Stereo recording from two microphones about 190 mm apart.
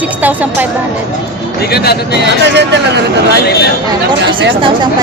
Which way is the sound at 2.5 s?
65° right (ahead or behind).